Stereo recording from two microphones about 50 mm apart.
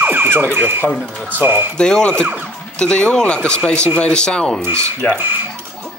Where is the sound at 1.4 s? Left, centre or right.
Right.